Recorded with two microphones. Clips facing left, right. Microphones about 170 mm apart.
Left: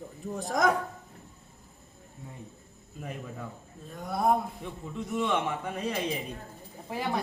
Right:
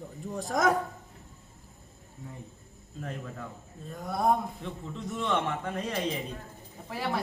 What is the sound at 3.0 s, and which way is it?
A man's voice, 10° left (ahead or behind).